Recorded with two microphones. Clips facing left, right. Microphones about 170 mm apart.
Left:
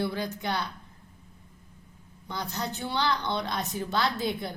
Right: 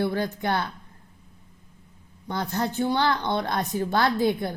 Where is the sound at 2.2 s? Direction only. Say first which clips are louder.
Right 6 dB; 50° right (ahead or behind).